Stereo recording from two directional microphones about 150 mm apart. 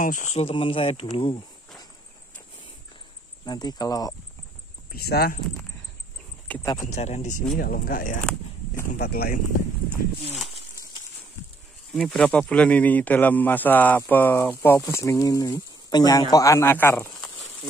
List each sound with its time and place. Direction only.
0.0 s speech: 55° left (ahead or behind); by 1.4 s 35° left (ahead or behind)
3.4 s speech: 25° left (ahead or behind)
4.9 s speech: 90° left
6.8 s speech: 50° left (ahead or behind)
7.5 s speech: 75° left (ahead or behind)
8.9 s speech: 90° left
11.9 s speech: centre (ahead or behind)
17.0 s a sound: 25° left (ahead or behind)